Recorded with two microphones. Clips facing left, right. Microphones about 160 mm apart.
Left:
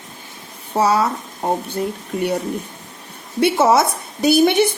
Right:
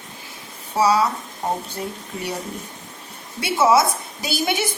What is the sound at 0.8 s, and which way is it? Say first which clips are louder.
Speech: left 1 dB; 55° left (ahead or behind).